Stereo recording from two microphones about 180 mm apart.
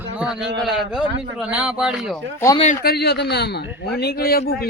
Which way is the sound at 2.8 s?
60° left (ahead or behind).